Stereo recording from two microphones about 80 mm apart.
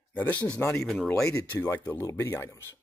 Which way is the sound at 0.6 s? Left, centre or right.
Left.